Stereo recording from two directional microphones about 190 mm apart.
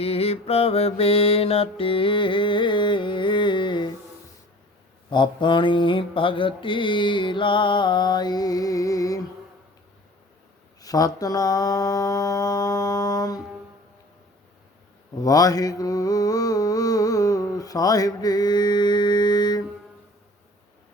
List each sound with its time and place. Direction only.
0.0 s mantra: 30° left (ahead or behind)
5.1 s mantra: 25° left (ahead or behind)
10.8 s mantra: 20° left (ahead or behind)
15.2 s mantra: 20° left (ahead or behind)